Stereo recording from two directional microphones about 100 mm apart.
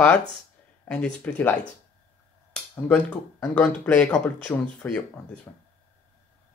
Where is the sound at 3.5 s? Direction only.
15° left (ahead or behind).